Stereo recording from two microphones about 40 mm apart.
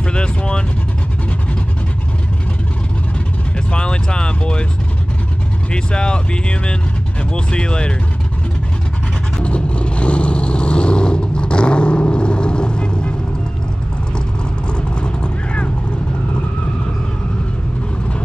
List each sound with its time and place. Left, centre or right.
0.1 s vehicle: left
3.7 s a sound: left
5.7 s speech: left
9.4 s vehicle: left
15.0 s vehicle: left